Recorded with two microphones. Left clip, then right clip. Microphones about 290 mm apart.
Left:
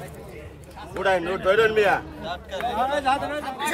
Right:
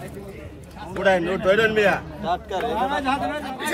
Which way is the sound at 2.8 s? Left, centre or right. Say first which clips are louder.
Left 3 dB; centre.